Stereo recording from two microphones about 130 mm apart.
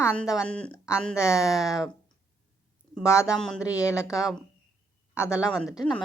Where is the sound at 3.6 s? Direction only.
20° left (ahead or behind).